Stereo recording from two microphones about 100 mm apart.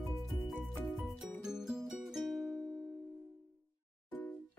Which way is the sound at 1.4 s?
5° right (ahead or behind).